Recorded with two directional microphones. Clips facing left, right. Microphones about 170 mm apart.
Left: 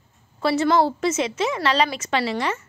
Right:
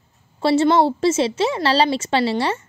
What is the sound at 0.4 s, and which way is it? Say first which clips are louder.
A woman's voice: right 3 dB; 25° right (ahead or behind).